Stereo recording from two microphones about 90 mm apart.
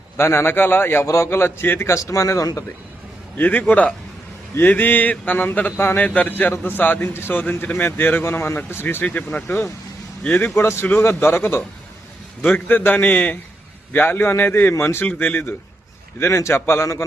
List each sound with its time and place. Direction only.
0.2 s a man's voice: 30° left (ahead or behind)
1.0 s a man's voice: 35° left (ahead or behind)
3.3 s a man's voice: 20° left (ahead or behind)